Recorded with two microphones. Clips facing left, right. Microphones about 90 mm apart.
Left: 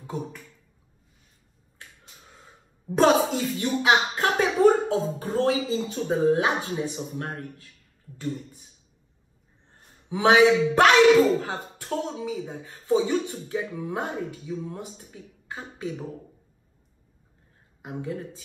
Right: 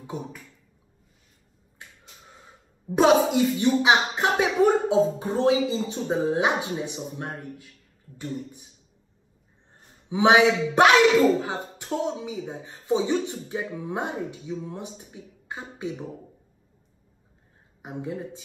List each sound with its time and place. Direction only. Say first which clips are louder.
2.9 s speech: right 1 dB; 10° right (ahead or behind)
7.2 s a man's voice: left 1 dB; 5° right (ahead or behind)
10.0 s speech: even; 15° right (ahead or behind)
17.8 s speech: even; 20° right (ahead or behind)